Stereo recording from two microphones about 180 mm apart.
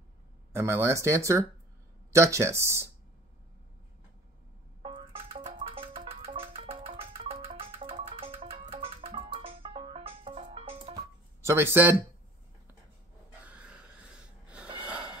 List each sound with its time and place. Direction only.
0.5 s speech: 15° right (ahead or behind)
4.8 s music: 30° right (ahead or behind)
11.4 s speech: 15° right (ahead or behind)
13.5 s wheeze: 5° right (ahead or behind)
14.8 s a sound: 5° right (ahead or behind)